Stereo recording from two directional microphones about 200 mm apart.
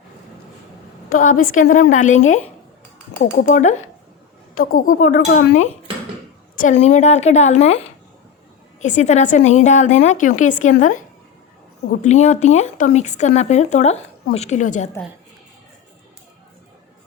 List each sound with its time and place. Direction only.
1.1 s speech: 40° left (ahead or behind)
3.3 s speech: 40° left (ahead or behind)
12.0 s speech: 35° left (ahead or behind)